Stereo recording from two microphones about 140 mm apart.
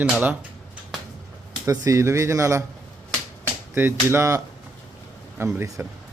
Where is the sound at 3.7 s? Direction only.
15° right (ahead or behind).